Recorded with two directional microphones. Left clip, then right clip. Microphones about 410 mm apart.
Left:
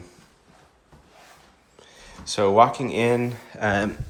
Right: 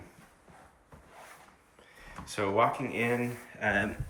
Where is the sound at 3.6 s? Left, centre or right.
Left.